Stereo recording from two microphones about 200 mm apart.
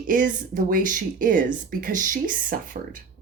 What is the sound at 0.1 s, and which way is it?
Speech, 40° right (ahead or behind).